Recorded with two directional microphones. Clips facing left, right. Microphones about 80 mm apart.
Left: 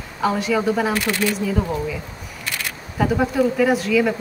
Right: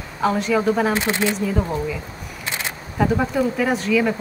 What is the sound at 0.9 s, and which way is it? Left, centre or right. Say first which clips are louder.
Speech: even; right.